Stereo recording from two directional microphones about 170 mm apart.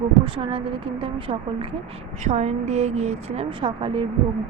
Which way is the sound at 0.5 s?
30° right (ahead or behind).